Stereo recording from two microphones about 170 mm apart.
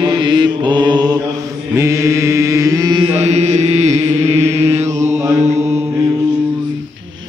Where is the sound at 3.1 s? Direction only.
40° right (ahead or behind).